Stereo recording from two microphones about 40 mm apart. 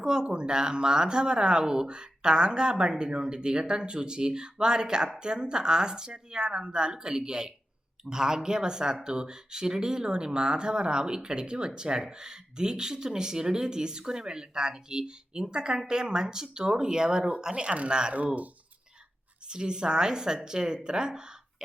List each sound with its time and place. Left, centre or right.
0.0 s speech: centre
19.5 s speech: right